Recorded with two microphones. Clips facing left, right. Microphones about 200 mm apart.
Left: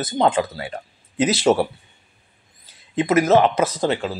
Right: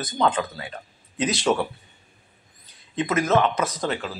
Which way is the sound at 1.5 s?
45° left (ahead or behind).